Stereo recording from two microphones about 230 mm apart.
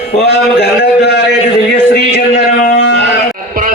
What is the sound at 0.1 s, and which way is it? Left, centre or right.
A man's voice, left.